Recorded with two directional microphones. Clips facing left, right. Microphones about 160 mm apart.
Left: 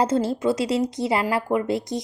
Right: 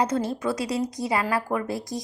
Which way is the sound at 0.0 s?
30° left (ahead or behind).